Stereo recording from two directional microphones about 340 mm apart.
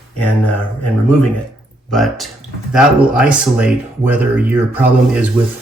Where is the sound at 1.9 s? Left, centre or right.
Centre.